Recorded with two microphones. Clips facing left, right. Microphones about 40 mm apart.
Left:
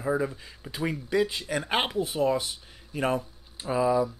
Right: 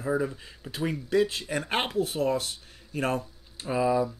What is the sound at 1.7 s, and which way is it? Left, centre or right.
Speech, centre.